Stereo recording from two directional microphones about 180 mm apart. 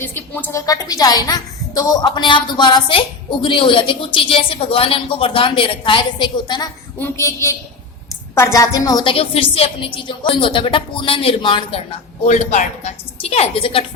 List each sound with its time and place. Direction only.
0.0 s a woman's voice: 10° left (ahead or behind); by 13.8 s 30° left (ahead or behind)